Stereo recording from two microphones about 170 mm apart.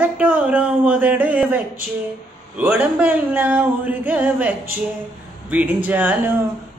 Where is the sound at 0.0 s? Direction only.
10° right (ahead or behind).